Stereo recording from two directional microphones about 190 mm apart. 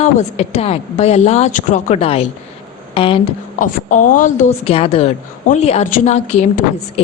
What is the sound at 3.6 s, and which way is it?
A woman's voice, 45° left (ahead or behind).